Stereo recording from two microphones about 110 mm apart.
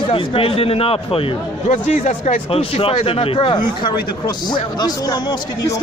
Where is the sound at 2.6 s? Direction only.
55° left (ahead or behind).